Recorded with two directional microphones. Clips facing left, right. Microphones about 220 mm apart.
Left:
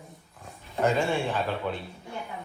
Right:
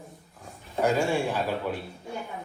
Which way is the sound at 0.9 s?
10° right (ahead or behind).